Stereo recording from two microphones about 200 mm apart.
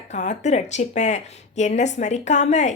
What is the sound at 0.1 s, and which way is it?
Speech, 35° left (ahead or behind).